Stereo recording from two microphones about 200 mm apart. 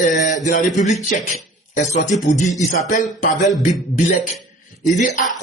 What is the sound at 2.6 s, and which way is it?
Music, 40° left (ahead or behind).